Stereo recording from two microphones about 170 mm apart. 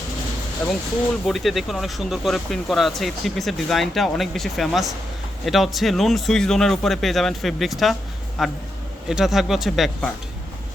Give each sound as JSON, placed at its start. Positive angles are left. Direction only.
{"t": 0.6, "sound": "speech", "side_deg": 0}